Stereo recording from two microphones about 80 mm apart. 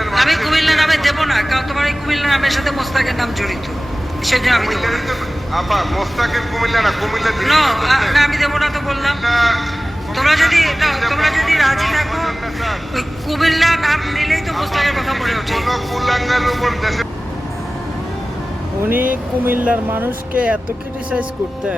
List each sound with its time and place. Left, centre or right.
0.0 s a sound: centre
4.3 s a man's voice: centre
19.5 s speech: right